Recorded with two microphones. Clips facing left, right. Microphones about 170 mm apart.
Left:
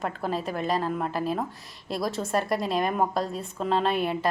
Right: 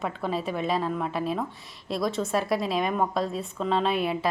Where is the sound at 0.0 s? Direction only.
Centre (ahead or behind).